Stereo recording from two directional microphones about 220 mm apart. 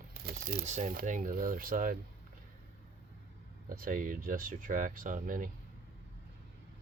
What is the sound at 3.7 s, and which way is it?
Speech, 40° right (ahead or behind).